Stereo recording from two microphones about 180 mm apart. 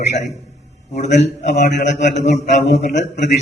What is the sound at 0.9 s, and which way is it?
A man's voice, 40° left (ahead or behind).